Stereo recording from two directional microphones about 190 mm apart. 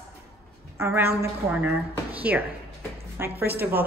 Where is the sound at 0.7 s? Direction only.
15° right (ahead or behind).